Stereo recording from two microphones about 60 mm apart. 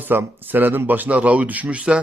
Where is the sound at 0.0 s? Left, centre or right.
Right.